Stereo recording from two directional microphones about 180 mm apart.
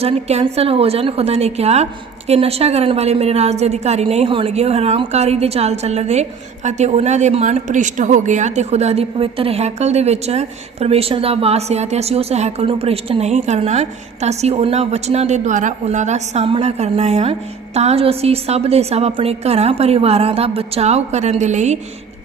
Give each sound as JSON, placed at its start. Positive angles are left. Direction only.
{"t": 0.0, "sound": "a woman's voice", "side_deg": -35}